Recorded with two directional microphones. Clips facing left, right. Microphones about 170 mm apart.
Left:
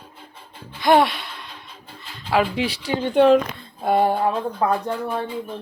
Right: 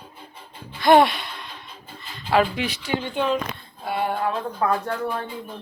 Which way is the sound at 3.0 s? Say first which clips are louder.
Left 11 dB; 65° left (ahead or behind).